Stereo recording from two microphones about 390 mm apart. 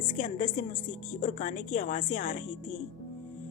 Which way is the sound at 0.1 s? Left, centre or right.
Centre.